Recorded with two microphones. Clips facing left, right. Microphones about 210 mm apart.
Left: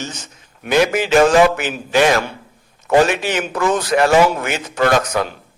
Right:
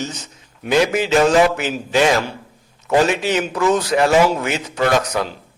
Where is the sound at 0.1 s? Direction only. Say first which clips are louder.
Right 1 dB; 55° left (ahead or behind).